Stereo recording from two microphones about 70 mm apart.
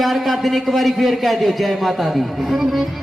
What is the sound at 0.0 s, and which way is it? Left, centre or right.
Speech, centre.